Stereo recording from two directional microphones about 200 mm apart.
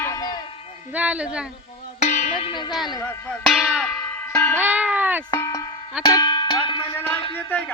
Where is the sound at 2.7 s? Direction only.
Centre (ahead or behind).